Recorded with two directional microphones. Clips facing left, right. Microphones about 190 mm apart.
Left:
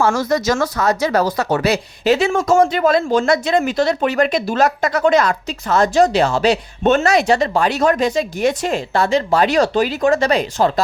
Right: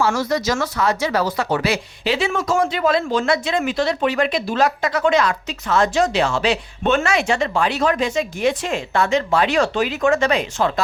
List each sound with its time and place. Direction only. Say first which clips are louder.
0.0 s speech: left 3 dB; 50° left (ahead or behind)